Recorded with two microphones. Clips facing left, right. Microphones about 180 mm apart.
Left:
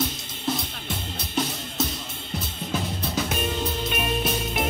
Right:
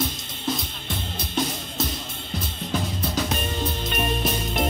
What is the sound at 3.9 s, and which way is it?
Music, 5° left (ahead or behind).